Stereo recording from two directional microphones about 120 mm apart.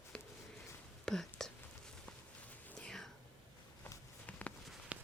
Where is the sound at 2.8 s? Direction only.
5° left (ahead or behind).